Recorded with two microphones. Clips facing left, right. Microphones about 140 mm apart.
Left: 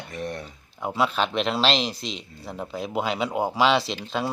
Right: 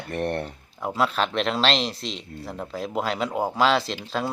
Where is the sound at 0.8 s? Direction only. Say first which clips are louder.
Even; centre (ahead or behind).